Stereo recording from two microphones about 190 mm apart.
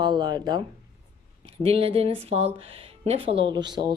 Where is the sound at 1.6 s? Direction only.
30° right (ahead or behind).